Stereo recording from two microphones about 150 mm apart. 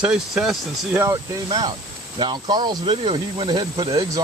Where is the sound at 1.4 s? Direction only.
30° right (ahead or behind).